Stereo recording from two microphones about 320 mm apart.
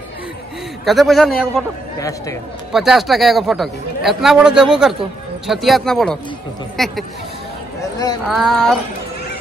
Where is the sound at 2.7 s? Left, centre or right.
Centre.